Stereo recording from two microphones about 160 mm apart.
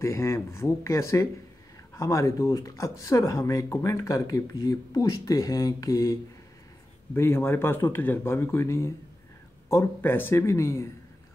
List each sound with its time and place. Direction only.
0.0 s speech: 15° left (ahead or behind)
7.2 s speech: 15° left (ahead or behind)